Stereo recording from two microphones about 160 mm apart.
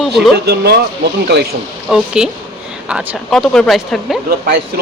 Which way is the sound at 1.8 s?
5° right (ahead or behind).